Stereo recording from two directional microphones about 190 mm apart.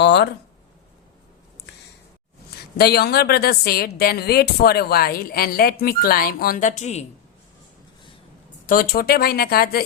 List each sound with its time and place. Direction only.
0.0 s a sound: 65° left (ahead or behind)
2.7 s a woman's voice: 55° left (ahead or behind); by 7.0 s 40° left (ahead or behind)
8.6 s speech: 50° left (ahead or behind)